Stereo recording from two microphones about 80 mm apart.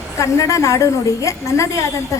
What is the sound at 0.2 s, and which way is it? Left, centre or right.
A woman's voice, left.